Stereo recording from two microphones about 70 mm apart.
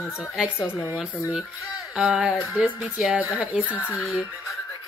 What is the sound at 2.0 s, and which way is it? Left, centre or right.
Speech, centre.